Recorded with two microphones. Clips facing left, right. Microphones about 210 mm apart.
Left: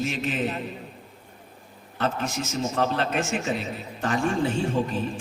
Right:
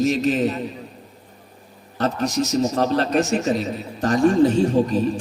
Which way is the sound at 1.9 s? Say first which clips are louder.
Right 6 dB; 40° right (ahead or behind).